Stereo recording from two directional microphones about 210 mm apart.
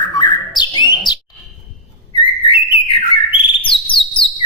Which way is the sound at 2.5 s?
25° left (ahead or behind).